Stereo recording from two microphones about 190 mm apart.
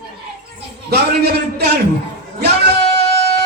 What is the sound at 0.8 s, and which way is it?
A man's voice, 60° right (ahead or behind).